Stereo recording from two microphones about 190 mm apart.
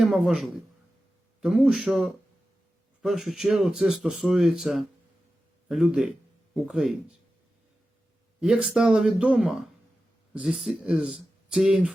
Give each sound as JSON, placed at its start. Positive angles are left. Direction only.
{"t": 0.0, "sound": "speech", "side_deg": -5}
{"t": 8.4, "sound": "speech", "side_deg": -5}